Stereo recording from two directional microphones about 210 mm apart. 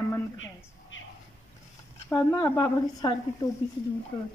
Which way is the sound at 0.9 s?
65° left (ahead or behind).